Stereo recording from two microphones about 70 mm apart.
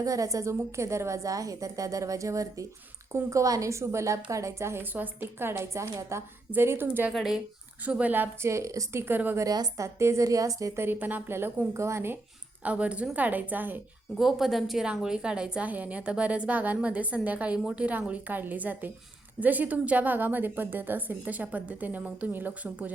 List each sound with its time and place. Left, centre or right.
0.0 s a woman's voice: right
7.1 s speech: centre
7.9 s a woman's voice: centre
8.4 s a woman's voice: right
8.9 s a woman's voice: right
9.4 s a woman's voice: right
9.8 s a woman's voice: right
10.8 s a woman's voice: right
12.6 s a woman's voice: centre
14.2 s a woman's voice: centre; by 22.9 s right